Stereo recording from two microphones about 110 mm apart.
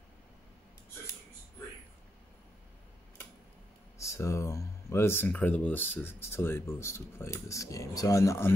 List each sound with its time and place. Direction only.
4.0 s speech: 25° left (ahead or behind)